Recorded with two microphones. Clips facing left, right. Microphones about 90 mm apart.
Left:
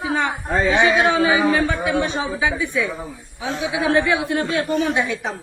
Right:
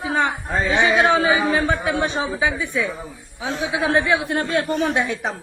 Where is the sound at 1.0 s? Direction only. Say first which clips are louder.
Even; 35° right (ahead or behind).